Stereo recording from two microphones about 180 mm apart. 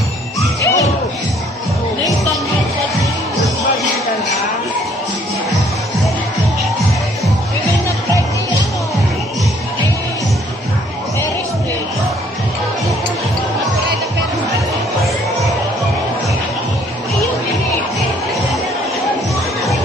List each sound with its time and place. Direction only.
0.6 s music: 15° left (ahead or behind)